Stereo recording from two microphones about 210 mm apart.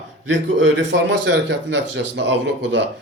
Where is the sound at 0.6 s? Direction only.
60° right (ahead or behind).